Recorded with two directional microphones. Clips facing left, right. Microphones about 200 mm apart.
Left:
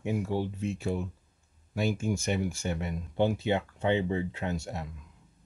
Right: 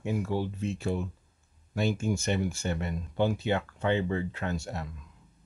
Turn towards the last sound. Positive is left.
turn(degrees=15)  # may be behind; listen again after turning